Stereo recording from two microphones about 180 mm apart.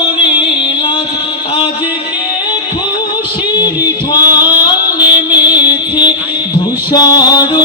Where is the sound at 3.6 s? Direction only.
25° left (ahead or behind).